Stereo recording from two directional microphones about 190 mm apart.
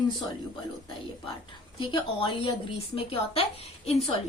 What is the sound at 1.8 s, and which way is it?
A woman's voice, 25° left (ahead or behind).